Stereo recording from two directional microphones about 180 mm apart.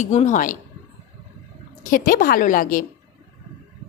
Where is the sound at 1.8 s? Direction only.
50° left (ahead or behind).